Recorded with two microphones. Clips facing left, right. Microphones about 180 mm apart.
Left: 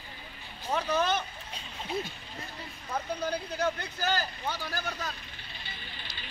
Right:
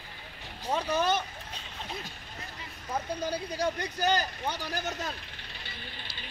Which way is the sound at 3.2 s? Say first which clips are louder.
Left 1 dB; 10° right (ahead or behind).